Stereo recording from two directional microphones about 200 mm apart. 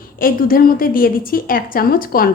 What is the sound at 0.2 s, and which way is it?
A woman's voice, 45° left (ahead or behind).